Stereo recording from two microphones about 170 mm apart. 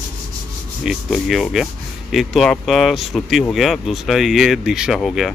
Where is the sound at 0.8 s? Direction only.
Centre (ahead or behind).